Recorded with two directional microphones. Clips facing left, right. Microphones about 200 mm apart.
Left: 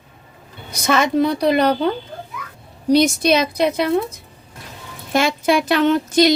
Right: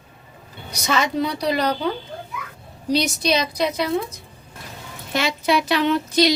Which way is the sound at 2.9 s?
55° left (ahead or behind).